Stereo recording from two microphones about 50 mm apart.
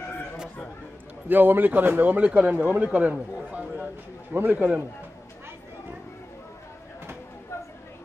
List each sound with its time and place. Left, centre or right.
1.3 s a man's voice: right